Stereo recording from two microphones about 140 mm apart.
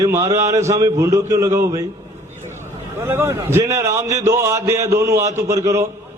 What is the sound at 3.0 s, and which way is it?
A man's voice, 20° right (ahead or behind).